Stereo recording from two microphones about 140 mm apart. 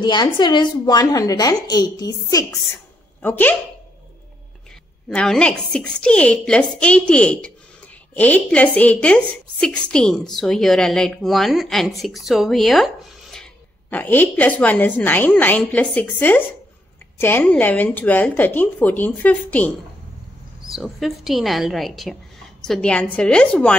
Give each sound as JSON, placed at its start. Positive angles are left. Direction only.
{"t": 0.0, "sound": "a woman's voice", "side_deg": 30}
{"t": 3.2, "sound": "speech", "side_deg": 10}
{"t": 5.1, "sound": "a woman's voice", "side_deg": 5}
{"t": 20.6, "sound": "a woman's voice", "side_deg": 0}